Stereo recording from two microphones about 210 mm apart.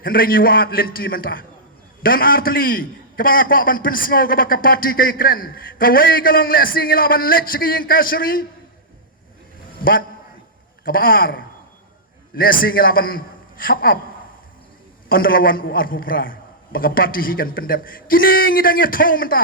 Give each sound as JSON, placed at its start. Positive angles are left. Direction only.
{"t": 0.0, "sound": "a man's voice", "side_deg": 45}
{"t": 10.8, "sound": "a man's voice", "side_deg": 45}
{"t": 15.1, "sound": "a man's voice", "side_deg": 45}